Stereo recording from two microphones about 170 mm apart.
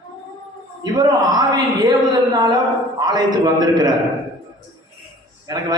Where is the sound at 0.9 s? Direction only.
25° right (ahead or behind).